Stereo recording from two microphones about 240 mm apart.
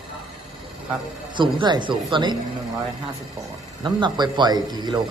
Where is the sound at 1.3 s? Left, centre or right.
Centre.